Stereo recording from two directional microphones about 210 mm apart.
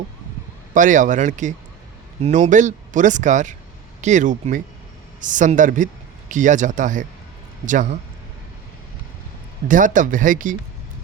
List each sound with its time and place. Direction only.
0.7 s a man's voice: 35° right (ahead or behind)
9.6 s speech: 40° right (ahead or behind)